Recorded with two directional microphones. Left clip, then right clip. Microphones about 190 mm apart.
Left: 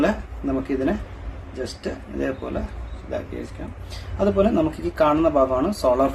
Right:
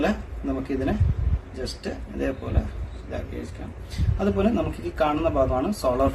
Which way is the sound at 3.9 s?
25° left (ahead or behind).